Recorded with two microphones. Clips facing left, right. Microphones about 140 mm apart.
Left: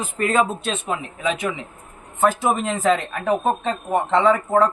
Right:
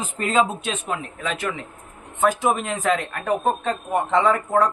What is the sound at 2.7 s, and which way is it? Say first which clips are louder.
A man's voice: left 3 dB; 5° left (ahead or behind).